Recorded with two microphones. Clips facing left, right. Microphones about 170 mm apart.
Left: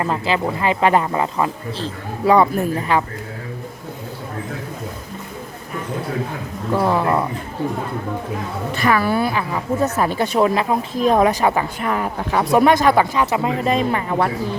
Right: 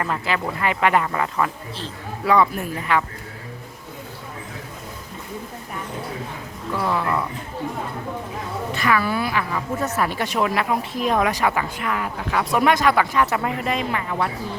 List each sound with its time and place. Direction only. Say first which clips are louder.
0.0 s speech: left 4 dB; 25° left (ahead or behind)
1.8 s speech: left 6 dB; 35° left (ahead or behind)
6.7 s speech: left 5 dB; 30° left (ahead or behind)
8.8 s speech: left 4 dB; 40° left (ahead or behind)
13.1 s speech: left 2 dB; 20° left (ahead or behind); by 14.3 s 40° left (ahead or behind)